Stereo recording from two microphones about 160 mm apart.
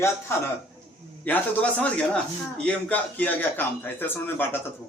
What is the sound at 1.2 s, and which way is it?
A man's voice, 10° left (ahead or behind).